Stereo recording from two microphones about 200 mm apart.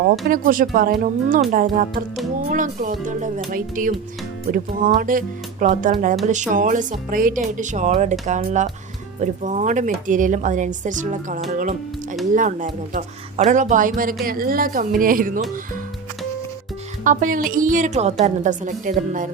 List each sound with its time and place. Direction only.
0.3 s a woman's voice: 45° right (ahead or behind)
17.0 s a woman's voice: 40° right (ahead or behind)